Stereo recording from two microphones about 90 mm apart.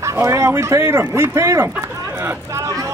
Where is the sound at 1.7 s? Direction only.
25° right (ahead or behind).